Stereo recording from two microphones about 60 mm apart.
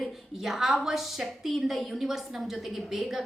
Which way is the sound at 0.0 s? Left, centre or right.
Centre.